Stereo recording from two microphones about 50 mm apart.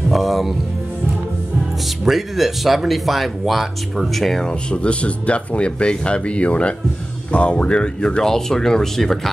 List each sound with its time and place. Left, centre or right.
0.1 s speech: centre
2.0 s speech: centre
4.6 s speech: left; by 9.3 s centre